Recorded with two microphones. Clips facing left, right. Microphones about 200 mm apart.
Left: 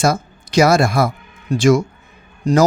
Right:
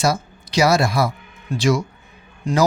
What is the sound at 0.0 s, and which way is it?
A man's voice, 50° left (ahead or behind).